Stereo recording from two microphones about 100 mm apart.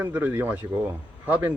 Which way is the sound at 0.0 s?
20° right (ahead or behind).